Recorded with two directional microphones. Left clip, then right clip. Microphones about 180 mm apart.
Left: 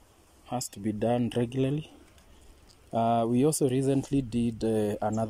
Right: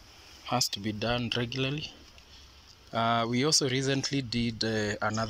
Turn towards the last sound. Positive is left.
turn(degrees=40)  # may be behind; listen again after turning